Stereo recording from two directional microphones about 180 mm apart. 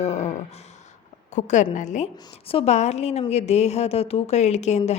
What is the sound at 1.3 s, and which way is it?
A woman's voice, 40° left (ahead or behind).